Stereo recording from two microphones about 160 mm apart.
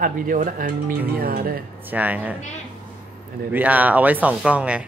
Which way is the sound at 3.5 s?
10° right (ahead or behind).